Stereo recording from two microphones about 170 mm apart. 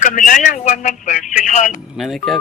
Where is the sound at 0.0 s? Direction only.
50° left (ahead or behind).